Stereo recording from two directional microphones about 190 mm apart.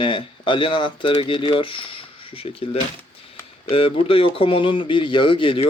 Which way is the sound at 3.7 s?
30° left (ahead or behind).